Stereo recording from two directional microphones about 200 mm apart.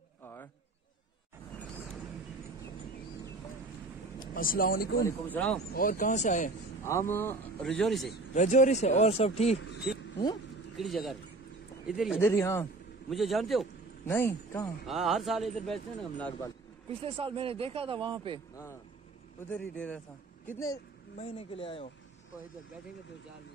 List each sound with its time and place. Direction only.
4.2 s speech: 45° left (ahead or behind)
5.0 s a man's voice: 5° left (ahead or behind)
5.7 s speech: 45° left (ahead or behind)
6.8 s a man's voice: 15° left (ahead or behind)
8.4 s speech: 35° left (ahead or behind)
10.8 s speech: centre (ahead or behind)
12.2 s a man's voice: 10° left (ahead or behind)
13.1 s speech: centre (ahead or behind)
14.0 s a man's voice: 15° left (ahead or behind)
14.9 s speech: centre (ahead or behind)
17.0 s speech: 25° right (ahead or behind)
19.4 s a man's voice: 10° left (ahead or behind)
21.2 s speech: 30° left (ahead or behind)